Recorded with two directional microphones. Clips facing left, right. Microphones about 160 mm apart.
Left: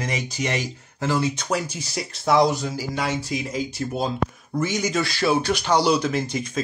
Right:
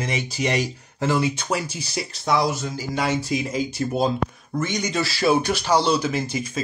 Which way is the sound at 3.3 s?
20° right (ahead or behind).